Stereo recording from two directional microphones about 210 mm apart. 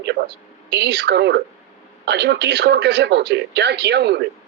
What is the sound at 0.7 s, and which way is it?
Speech, 55° right (ahead or behind).